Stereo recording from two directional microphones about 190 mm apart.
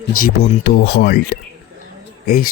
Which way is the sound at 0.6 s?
55° left (ahead or behind).